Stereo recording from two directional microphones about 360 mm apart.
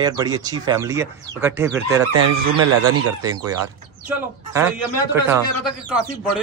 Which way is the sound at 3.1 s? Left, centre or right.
Centre.